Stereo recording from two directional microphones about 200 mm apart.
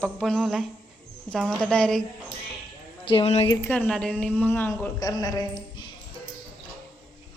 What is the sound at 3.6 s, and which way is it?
A woman's voice, 10° left (ahead or behind).